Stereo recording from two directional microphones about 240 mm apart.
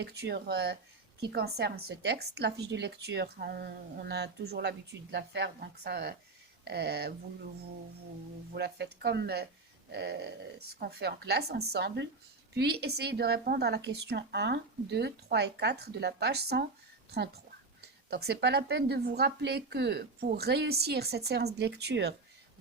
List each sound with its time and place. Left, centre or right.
0.0 s speech: right
8.5 s speech: right
18.1 s speech: right